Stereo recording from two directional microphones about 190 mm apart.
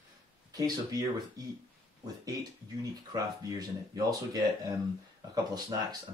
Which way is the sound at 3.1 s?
20° right (ahead or behind).